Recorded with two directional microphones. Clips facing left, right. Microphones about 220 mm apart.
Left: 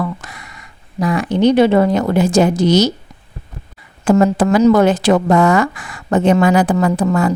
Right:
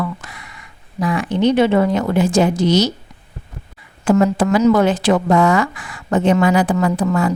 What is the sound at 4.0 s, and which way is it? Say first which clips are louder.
A woman's voice: left 2 dB; 40° left (ahead or behind).